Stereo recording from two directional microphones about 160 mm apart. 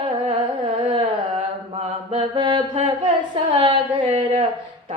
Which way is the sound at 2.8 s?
30° right (ahead or behind).